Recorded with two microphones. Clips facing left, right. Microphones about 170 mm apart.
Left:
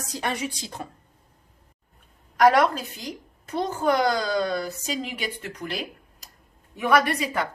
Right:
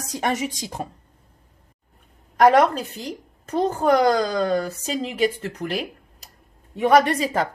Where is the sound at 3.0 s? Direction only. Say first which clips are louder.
Right 4 dB; 35° right (ahead or behind).